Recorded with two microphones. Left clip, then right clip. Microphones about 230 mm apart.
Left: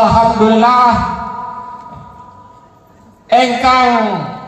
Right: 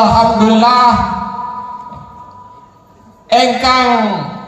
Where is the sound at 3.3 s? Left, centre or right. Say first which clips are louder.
Even; right.